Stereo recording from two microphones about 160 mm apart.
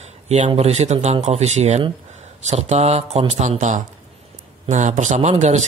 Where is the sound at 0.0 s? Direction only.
45° right (ahead or behind).